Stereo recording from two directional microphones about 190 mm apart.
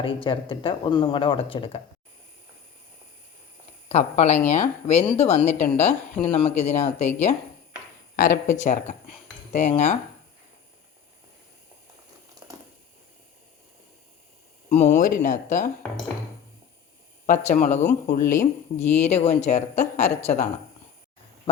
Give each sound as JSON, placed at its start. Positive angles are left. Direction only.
{"t": 0.0, "sound": "speech", "side_deg": 25}
{"t": 3.8, "sound": "speech", "side_deg": 35}
{"t": 8.1, "sound": "speech", "side_deg": 45}
{"t": 12.4, "sound": "a sound", "side_deg": -20}
{"t": 14.7, "sound": "speech", "side_deg": 35}
{"t": 17.2, "sound": "speech", "side_deg": 40}
{"t": 21.5, "sound": "a sound", "side_deg": 30}